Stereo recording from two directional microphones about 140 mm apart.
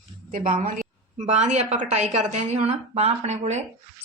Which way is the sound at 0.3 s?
70° right (ahead or behind).